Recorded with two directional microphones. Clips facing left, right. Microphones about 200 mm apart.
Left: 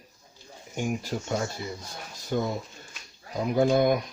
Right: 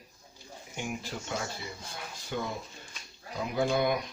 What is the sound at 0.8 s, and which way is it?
Speech, 45° left (ahead or behind).